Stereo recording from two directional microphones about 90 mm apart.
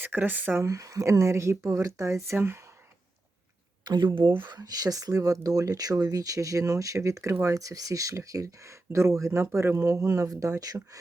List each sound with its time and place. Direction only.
0.0 s speech: 20° right (ahead or behind)
0.6 s speech: 35° right (ahead or behind)
3.8 s speech: 60° right (ahead or behind)
4.4 s speech: 50° right (ahead or behind)